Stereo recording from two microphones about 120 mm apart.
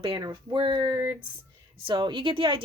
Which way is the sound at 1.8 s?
45° right (ahead or behind).